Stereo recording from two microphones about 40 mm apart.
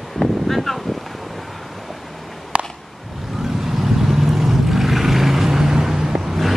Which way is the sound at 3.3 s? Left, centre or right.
Centre.